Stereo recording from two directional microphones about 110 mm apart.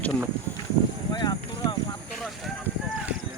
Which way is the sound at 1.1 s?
40° left (ahead or behind).